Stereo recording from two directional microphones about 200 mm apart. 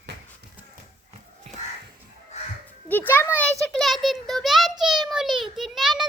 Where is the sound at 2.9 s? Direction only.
10° left (ahead or behind).